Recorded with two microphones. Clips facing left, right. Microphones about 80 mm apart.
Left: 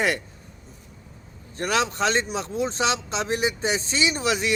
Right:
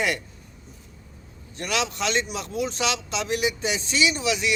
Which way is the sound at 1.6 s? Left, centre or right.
Left.